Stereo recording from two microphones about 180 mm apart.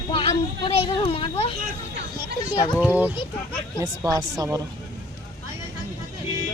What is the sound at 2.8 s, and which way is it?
Speech, 10° right (ahead or behind).